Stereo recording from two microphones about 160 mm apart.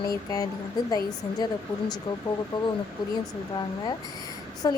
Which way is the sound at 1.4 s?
25° left (ahead or behind).